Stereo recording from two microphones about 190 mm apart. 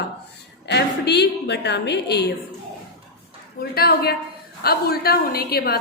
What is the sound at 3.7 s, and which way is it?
A woman's voice, 55° left (ahead or behind).